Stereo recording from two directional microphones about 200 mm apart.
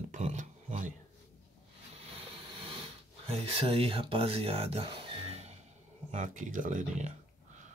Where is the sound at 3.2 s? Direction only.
30° right (ahead or behind).